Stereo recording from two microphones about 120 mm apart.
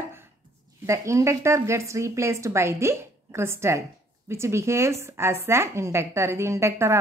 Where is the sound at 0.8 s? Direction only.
25° right (ahead or behind).